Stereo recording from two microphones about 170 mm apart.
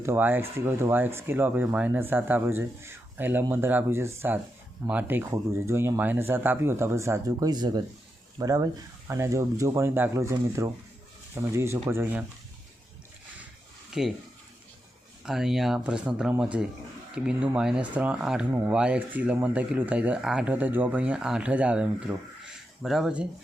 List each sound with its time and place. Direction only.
0.0 s speech: 10° right (ahead or behind)
13.9 s speech: 5° right (ahead or behind)
15.2 s speech: 5° right (ahead or behind)